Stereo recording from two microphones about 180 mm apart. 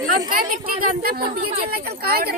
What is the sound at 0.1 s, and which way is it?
A woman's voice, 50° right (ahead or behind).